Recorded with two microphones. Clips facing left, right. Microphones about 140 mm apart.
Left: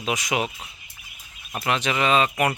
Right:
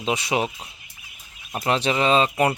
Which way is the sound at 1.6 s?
30° right (ahead or behind).